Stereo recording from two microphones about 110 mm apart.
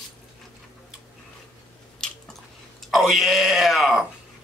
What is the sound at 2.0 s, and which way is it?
Chewing, 5° left (ahead or behind).